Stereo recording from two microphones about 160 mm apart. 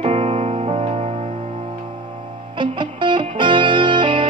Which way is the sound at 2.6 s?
30° right (ahead or behind).